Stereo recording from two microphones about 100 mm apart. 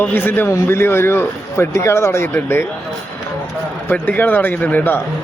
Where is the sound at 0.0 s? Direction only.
20° left (ahead or behind).